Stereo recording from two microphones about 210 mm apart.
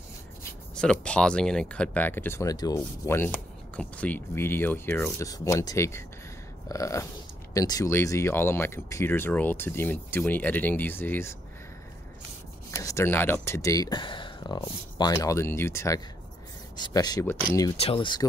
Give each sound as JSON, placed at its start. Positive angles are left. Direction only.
{"t": 0.4, "sound": "speech", "side_deg": 5}
{"t": 12.7, "sound": "speech", "side_deg": 15}